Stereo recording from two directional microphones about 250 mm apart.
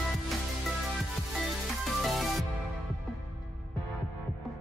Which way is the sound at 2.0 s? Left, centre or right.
Centre.